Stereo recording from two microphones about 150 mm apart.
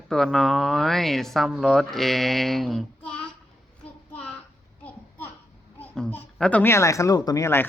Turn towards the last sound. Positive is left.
turn(degrees=15)  # may be behind; listen again after turning